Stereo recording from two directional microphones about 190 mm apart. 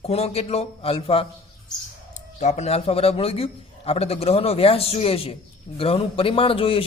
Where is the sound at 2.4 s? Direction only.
35° left (ahead or behind).